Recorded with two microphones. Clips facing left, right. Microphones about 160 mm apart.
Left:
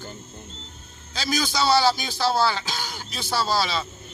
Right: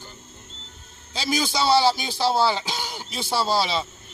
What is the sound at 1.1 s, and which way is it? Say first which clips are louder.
Speech: right 1 dB; 25° right (ahead or behind).